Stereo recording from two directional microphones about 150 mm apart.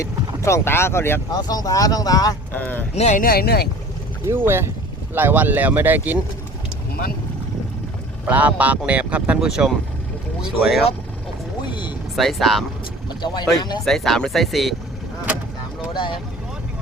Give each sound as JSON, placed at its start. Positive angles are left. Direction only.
{"t": 0.0, "sound": "speech", "side_deg": 20}
{"t": 2.5, "sound": "speech", "side_deg": 10}
{"t": 2.9, "sound": "speech", "side_deg": 50}
{"t": 4.3, "sound": "speech", "side_deg": -15}
{"t": 8.3, "sound": "speech", "side_deg": -10}
{"t": 11.7, "sound": "vehicle", "side_deg": 30}
{"t": 12.1, "sound": "speech", "side_deg": 0}
{"t": 13.6, "sound": "speech", "side_deg": 30}
{"t": 13.8, "sound": "speech", "side_deg": 0}